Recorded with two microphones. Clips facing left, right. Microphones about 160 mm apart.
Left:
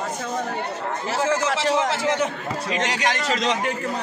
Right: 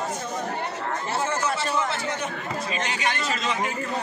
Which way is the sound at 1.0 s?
90° left.